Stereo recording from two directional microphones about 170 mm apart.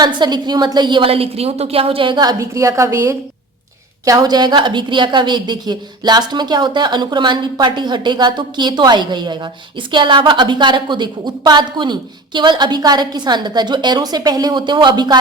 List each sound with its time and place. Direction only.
0.0 s a woman's voice: 25° right (ahead or behind)